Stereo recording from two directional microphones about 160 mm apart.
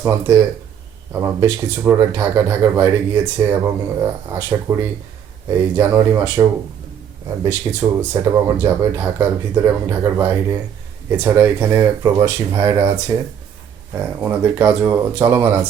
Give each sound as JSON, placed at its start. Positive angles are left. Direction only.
{"t": 0.0, "sound": "speech", "side_deg": -15}